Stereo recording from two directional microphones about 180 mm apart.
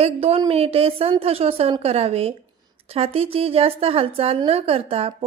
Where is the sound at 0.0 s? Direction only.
35° right (ahead or behind).